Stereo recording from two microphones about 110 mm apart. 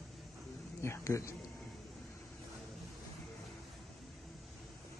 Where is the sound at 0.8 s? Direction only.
25° left (ahead or behind).